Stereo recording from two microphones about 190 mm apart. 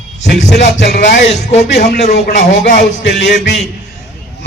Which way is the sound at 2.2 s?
40° left (ahead or behind).